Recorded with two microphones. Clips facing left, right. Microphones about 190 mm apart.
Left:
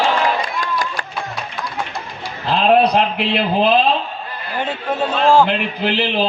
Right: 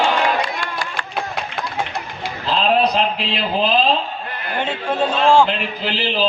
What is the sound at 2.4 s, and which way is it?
A man's voice, 60° left (ahead or behind).